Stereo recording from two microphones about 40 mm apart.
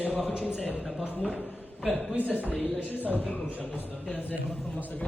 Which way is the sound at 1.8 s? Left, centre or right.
Centre.